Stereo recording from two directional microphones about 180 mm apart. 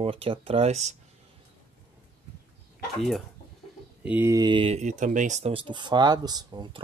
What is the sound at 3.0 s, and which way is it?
Speech, centre (ahead or behind).